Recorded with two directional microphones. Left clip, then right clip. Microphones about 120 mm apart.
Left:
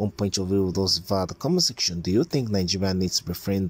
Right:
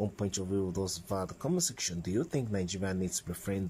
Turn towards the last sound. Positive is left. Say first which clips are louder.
# left 10 dB
turn(degrees=20)  # may be behind; listen again after turning